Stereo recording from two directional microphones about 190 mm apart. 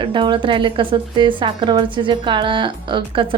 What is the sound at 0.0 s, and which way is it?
A woman's voice, 25° right (ahead or behind).